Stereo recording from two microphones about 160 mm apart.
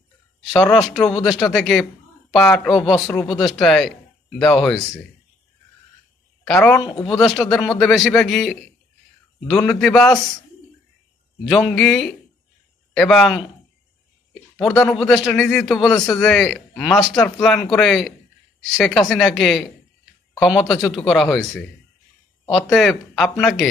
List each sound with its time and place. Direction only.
0.5 s a man's voice: 5° left (ahead or behind)
6.4 s a woman's voice: 5° left (ahead or behind)
6.8 s speech: 30° left (ahead or behind)
7.2 s a man's voice: centre (ahead or behind)
11.4 s a man's voice: centre (ahead or behind)
14.8 s a man's voice: centre (ahead or behind)